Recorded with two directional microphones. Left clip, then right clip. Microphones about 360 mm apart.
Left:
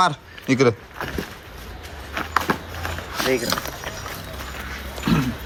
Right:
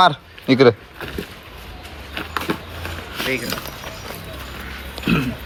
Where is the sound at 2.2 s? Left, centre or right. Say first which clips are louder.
Left 3 dB; centre.